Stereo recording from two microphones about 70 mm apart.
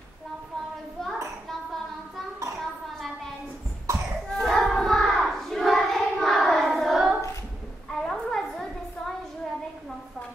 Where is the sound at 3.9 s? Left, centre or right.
Right.